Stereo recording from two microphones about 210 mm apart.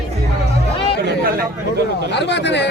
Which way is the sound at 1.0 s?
50° right (ahead or behind).